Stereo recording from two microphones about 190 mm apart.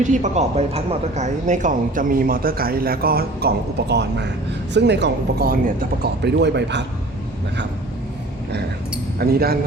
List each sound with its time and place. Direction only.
0.0 s speech: 40° right (ahead or behind)
6.2 s speech: 65° right (ahead or behind)
9.1 s speech: 55° right (ahead or behind)